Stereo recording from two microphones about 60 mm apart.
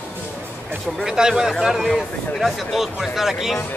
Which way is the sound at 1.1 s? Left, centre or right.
Centre.